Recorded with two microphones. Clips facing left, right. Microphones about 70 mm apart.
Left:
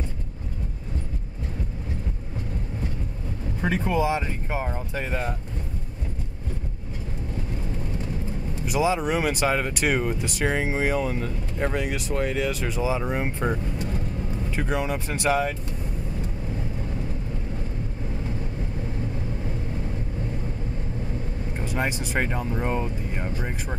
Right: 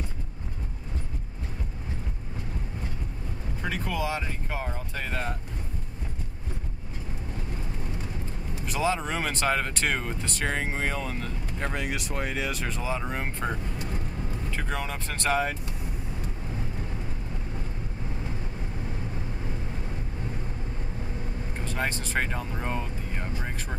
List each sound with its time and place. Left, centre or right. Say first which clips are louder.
3.6 s speech: left 7 dB; left
8.6 s speech: left 4 dB; centre
21.6 s speech: left 3 dB; centre